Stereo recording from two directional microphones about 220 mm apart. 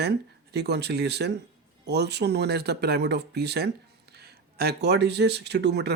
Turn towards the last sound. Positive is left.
turn(degrees=-50)  # may be behind; listen again after turning